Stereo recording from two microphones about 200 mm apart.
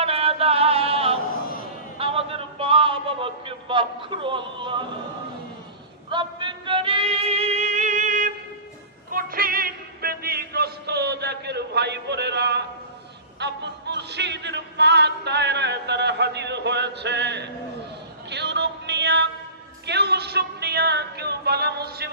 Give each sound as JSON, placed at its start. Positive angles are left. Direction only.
{"t": 0.0, "sound": "music", "side_deg": -30}
{"t": 6.1, "sound": "music", "side_deg": -25}
{"t": 18.3, "sound": "a sound", "side_deg": -60}
{"t": 19.8, "sound": "music", "side_deg": -55}